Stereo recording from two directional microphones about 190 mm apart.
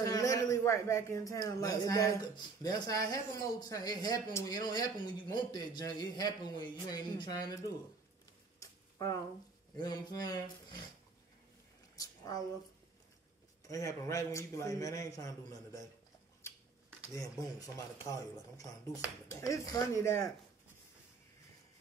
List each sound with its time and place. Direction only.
0.0 s a man's voice: 15° left (ahead or behind)
8.5 s a sound: 20° left (ahead or behind)
9.8 s speech: 20° left (ahead or behind)
11.9 s a sound: 20° left (ahead or behind)
13.7 s a man's voice: 15° left (ahead or behind)
17.1 s a man's voice: 15° left (ahead or behind)